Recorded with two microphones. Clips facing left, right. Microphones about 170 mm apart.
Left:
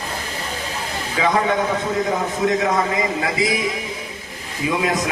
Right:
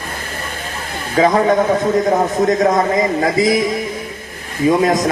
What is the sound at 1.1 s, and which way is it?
Speech, 40° right (ahead or behind).